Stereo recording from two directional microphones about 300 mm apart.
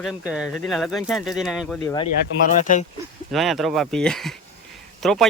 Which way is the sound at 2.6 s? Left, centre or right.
Left.